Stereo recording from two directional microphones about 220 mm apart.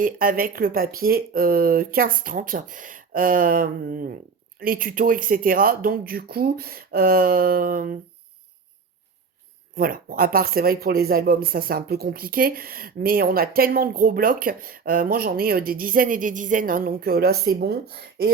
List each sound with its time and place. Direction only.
0.0 s speech: 40° right (ahead or behind)
9.7 s speech: 40° right (ahead or behind)